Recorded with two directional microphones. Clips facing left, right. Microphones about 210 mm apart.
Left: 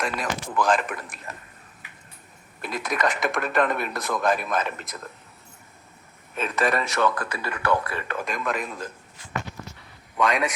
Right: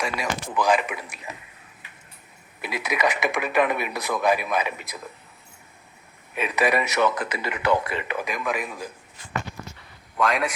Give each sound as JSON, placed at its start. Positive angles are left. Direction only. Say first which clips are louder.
{"t": 0.0, "sound": "speech", "louder": "even", "side_deg": -10}
{"t": 0.8, "sound": "speech", "louder": "even", "side_deg": 0}
{"t": 2.6, "sound": "speech", "louder": "right 1 dB", "side_deg": -5}
{"t": 6.3, "sound": "speech", "louder": "right 2 dB", "side_deg": -15}
{"t": 10.2, "sound": "speech", "louder": "even", "side_deg": -5}